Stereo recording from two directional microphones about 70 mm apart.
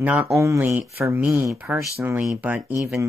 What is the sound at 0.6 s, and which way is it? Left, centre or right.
Speech, right.